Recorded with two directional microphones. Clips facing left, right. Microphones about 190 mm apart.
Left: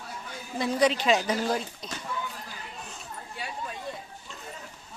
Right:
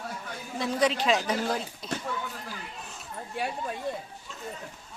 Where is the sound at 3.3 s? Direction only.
55° right (ahead or behind).